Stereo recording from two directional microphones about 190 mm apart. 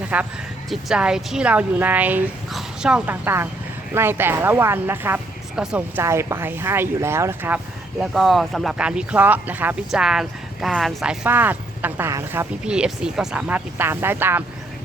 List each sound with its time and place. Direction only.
0.1 s speech: 5° right (ahead or behind)